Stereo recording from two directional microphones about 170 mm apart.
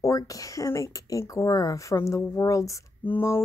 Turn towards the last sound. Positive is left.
turn(degrees=15)  # may be behind; listen again after turning